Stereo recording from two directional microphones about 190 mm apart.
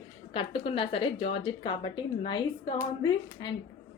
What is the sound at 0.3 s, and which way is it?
A woman's voice, 30° left (ahead or behind).